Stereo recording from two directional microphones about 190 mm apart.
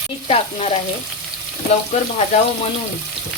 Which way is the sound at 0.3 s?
30° left (ahead or behind).